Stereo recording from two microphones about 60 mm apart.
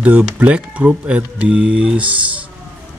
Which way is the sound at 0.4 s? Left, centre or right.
Right.